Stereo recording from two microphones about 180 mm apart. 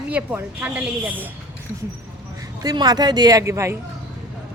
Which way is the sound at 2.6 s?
20° right (ahead or behind).